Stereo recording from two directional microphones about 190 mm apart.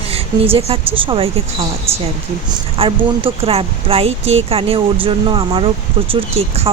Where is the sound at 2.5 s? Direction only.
30° right (ahead or behind).